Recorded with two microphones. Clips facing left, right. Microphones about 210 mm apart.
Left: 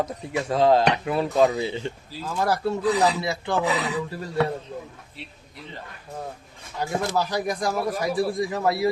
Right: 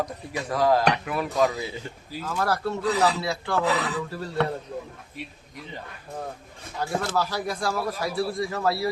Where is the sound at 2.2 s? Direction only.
15° left (ahead or behind).